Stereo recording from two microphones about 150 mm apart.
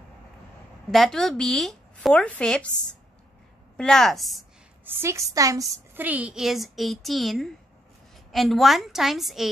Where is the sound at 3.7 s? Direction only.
5° left (ahead or behind).